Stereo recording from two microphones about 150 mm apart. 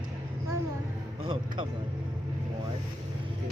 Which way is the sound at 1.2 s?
35° right (ahead or behind).